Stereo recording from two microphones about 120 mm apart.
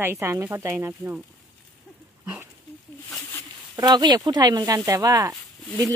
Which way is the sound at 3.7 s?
35° right (ahead or behind).